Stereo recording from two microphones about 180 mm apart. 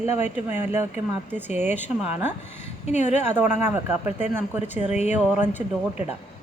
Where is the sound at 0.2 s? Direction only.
40° left (ahead or behind).